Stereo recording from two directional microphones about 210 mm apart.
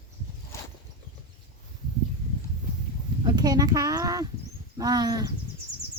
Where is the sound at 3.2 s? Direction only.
20° right (ahead or behind).